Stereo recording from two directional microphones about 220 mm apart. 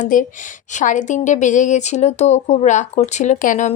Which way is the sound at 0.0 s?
35° left (ahead or behind).